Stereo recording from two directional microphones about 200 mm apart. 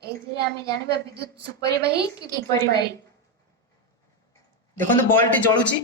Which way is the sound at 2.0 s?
20° left (ahead or behind).